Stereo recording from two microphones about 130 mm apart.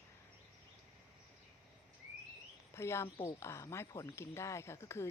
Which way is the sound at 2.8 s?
20° left (ahead or behind).